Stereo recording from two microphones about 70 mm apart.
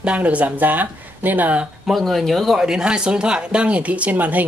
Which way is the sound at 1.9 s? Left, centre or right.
Centre.